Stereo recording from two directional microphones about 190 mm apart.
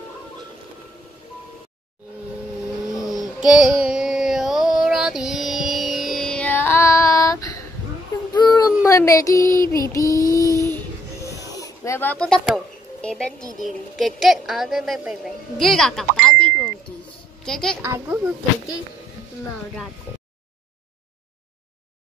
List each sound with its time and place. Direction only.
2.9 s a sound: 20° left (ahead or behind)
3.4 s a woman's voice: centre (ahead or behind)
3.8 s mantra: 5° right (ahead or behind); by 7.6 s 15° left (ahead or behind)
8.3 s child singing: 20° left (ahead or behind)
8.8 s female singing: 15° left (ahead or behind)
10.7 s music: 15° left (ahead or behind)
11.5 s a woman's voice: 15° left (ahead or behind)
17.8 s speech: 10° right (ahead or behind)